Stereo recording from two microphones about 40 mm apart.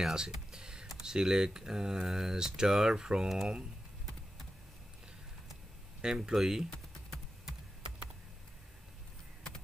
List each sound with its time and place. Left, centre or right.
0.1 s computer keyboard: centre
0.8 s speech: centre
6.0 s speech: centre